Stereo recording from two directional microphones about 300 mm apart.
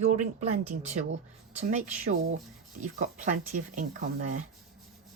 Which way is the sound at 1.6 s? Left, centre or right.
Right.